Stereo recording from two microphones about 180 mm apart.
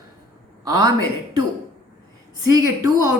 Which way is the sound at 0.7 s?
20° right (ahead or behind).